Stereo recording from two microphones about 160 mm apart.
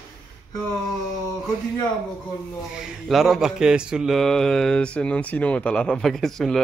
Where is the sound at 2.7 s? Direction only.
5° right (ahead or behind).